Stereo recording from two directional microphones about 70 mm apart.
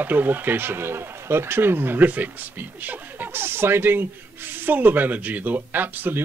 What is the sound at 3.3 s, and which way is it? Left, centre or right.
A man's voice, right.